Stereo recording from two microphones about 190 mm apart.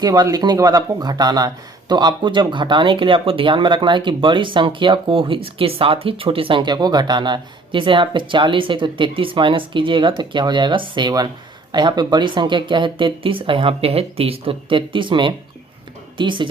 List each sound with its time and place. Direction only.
0.0 s speech: 20° right (ahead or behind)